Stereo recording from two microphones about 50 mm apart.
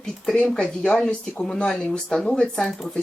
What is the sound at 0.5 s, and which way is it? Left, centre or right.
Speech, left.